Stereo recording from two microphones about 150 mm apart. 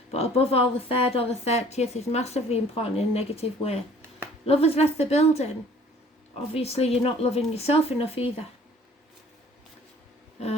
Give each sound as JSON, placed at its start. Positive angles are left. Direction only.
{"t": 0.1, "sound": "a woman's voice", "side_deg": 40}
{"t": 6.5, "sound": "a woman's voice", "side_deg": 45}